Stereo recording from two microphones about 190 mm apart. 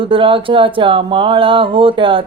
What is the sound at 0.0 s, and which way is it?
Mantra, 25° right (ahead or behind).